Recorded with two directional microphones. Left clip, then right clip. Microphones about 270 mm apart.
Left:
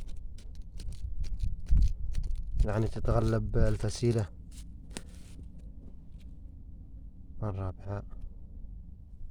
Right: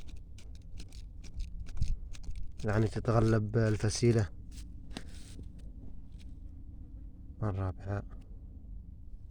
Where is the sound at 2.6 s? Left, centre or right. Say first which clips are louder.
Right 1 dB; centre.